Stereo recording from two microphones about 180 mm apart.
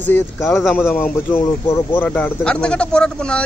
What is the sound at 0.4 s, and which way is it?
Speech, centre (ahead or behind).